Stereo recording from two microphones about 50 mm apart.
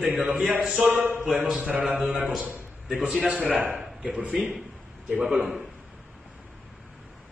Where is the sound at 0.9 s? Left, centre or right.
Right.